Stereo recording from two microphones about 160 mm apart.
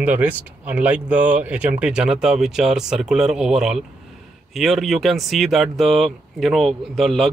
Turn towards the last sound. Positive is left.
turn(degrees=0)  # may be behind; listen again after turning